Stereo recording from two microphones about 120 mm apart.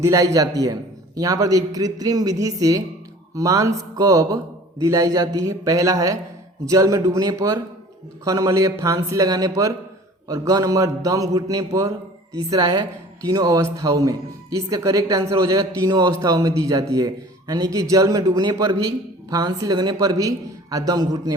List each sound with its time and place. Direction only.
0.0 s a man's voice: 25° right (ahead or behind)